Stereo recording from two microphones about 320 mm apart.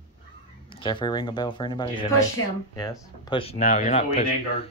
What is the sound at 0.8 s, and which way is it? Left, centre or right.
Speech, centre.